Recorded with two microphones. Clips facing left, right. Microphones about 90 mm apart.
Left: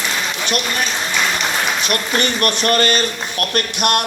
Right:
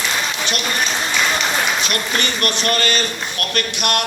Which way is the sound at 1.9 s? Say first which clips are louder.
Left 3 dB; 45° left (ahead or behind).